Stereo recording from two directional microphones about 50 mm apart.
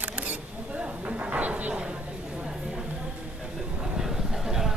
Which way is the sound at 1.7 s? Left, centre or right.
Centre.